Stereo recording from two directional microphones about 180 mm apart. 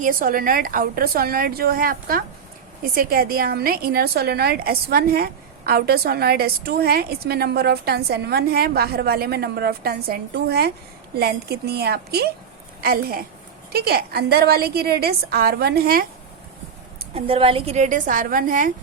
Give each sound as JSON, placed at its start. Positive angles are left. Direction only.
{"t": 0.0, "sound": "a woman's voice", "side_deg": -50}
{"t": 17.2, "sound": "a woman's voice", "side_deg": -30}